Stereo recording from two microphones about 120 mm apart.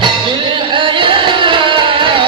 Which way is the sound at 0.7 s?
45° right (ahead or behind).